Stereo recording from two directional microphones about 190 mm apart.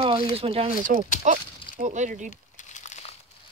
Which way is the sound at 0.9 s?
45° right (ahead or behind).